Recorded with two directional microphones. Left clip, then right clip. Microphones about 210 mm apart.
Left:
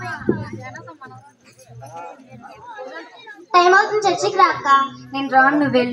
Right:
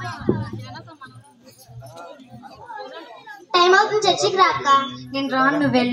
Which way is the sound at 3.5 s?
20° left (ahead or behind).